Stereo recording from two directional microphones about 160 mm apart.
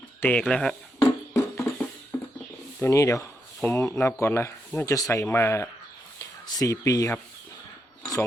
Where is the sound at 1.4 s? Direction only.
15° left (ahead or behind).